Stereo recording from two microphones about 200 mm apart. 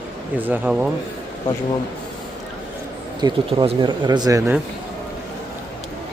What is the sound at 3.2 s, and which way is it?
Speech, 20° right (ahead or behind).